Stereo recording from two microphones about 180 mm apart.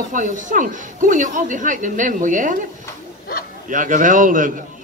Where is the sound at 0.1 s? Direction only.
45° right (ahead or behind).